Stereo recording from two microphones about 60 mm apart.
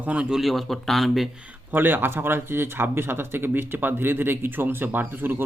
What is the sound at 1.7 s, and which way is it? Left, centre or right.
Speech, right.